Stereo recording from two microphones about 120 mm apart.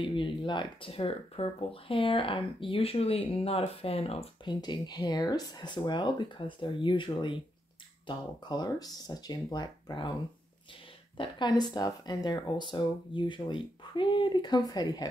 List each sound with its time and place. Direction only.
0.0 s speech: 45° left (ahead or behind)
4.5 s speech: 35° left (ahead or behind)
11.1 s speech: 40° left (ahead or behind)